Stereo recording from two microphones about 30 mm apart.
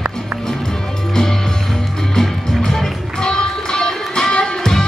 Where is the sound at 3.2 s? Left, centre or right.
Left.